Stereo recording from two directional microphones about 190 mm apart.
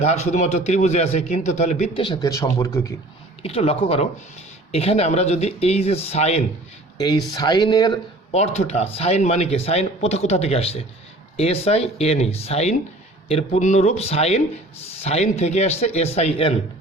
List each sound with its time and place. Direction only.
0.0 s speech: 35° left (ahead or behind)
2.3 s a man's voice: 15° left (ahead or behind)
3.4 s speech: 30° left (ahead or behind)
7.0 s speech: 20° left (ahead or behind)
8.3 s speech: 35° left (ahead or behind)